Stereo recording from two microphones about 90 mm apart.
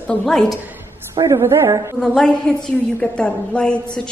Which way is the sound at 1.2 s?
35° right (ahead or behind).